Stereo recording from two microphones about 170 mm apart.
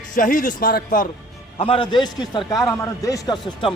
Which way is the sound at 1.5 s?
35° left (ahead or behind).